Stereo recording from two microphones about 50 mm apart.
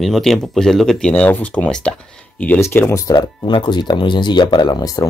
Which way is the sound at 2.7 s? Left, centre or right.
Left.